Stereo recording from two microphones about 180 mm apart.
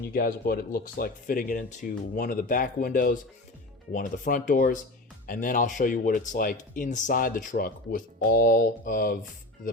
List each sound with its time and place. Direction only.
0.1 s speech: 55° left (ahead or behind)